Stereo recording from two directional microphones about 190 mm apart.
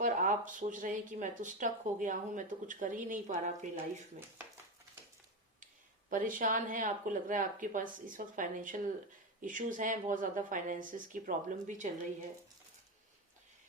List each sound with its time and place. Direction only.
0.0 s speech: 45° right (ahead or behind)
6.1 s speech: 45° right (ahead or behind)